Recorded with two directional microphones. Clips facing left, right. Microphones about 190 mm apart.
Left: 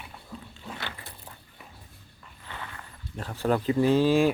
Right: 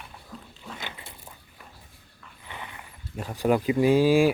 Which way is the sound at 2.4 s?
15° right (ahead or behind).